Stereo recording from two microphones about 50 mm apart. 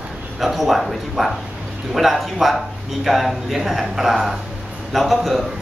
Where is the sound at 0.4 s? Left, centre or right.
Centre.